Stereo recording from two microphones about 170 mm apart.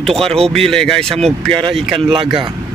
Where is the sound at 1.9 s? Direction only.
30° right (ahead or behind).